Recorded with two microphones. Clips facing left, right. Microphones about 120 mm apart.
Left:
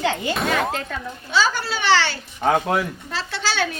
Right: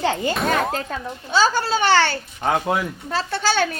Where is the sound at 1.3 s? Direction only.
40° right (ahead or behind).